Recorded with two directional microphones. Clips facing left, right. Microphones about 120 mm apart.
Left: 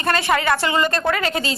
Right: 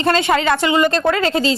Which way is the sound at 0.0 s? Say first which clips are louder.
Right 4 dB; 25° right (ahead or behind).